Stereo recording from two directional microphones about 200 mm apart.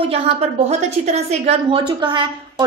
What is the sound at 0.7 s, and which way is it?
A woman's voice, 30° right (ahead or behind).